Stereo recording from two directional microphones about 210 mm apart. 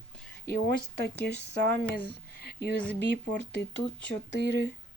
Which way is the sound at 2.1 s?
50° left (ahead or behind).